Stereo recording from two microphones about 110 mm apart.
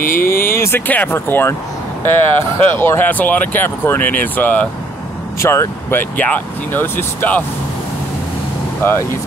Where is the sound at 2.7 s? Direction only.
20° left (ahead or behind).